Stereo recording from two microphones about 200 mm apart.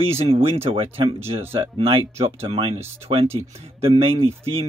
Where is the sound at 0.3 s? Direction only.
30° right (ahead or behind).